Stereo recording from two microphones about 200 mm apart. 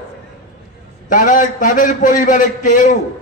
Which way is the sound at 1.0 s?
40° left (ahead or behind).